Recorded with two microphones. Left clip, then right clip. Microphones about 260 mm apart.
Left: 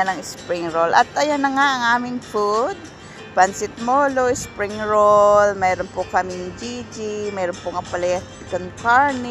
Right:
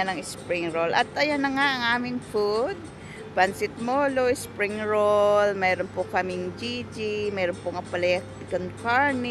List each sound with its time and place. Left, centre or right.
0.5 s speech: centre
3.8 s speech: centre
6.2 s music: left
6.7 s speech: centre